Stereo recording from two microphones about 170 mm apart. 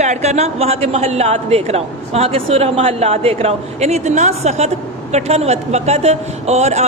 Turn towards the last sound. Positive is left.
turn(degrees=-40)  # may be behind; listen again after turning